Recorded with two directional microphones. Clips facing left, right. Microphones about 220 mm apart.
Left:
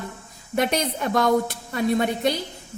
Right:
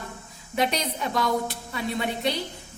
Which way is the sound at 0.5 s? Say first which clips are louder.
Left 3 dB; 50° left (ahead or behind).